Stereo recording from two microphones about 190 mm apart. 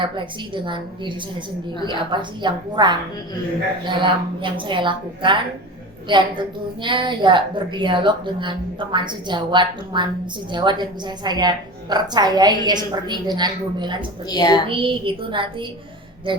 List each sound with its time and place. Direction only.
0.5 s a woman's voice: 25° right (ahead or behind)
14.3 s speech: 20° left (ahead or behind)
14.7 s a woman's voice: 25° right (ahead or behind)